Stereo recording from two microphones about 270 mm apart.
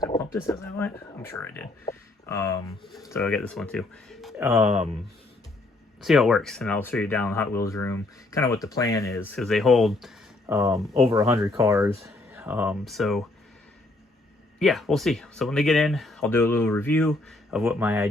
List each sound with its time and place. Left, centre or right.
0.0 s a sound: centre
0.4 s speech: centre
2.8 s speech: centre
4.6 s speech: right
6.0 s speech: centre
10.5 s speech: centre
14.6 s speech: centre